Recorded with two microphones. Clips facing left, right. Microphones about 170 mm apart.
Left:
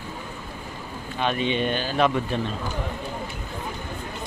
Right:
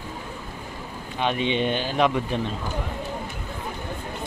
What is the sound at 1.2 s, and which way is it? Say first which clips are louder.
Speech: right 1 dB; 20° right (ahead or behind).